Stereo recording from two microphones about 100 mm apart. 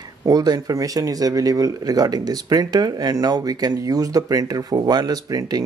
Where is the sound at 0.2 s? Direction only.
40° right (ahead or behind).